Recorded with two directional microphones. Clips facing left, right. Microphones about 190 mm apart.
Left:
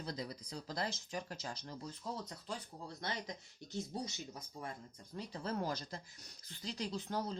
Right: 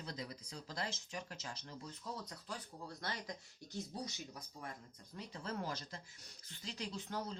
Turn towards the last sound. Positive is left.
turn(degrees=35)  # may be behind; listen again after turning